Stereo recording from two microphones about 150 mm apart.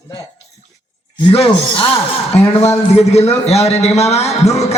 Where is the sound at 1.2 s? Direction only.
40° left (ahead or behind).